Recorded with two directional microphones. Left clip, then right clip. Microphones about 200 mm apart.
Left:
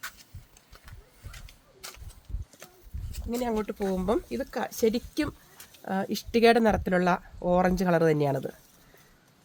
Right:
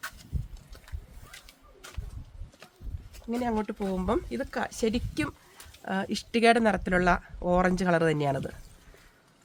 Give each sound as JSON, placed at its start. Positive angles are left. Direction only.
{"t": 3.2, "sound": "speech", "side_deg": 45}